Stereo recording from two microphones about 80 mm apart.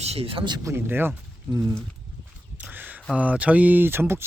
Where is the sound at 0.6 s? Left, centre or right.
Right.